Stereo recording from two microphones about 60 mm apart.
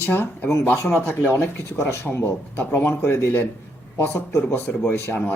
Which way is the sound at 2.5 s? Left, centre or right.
Left.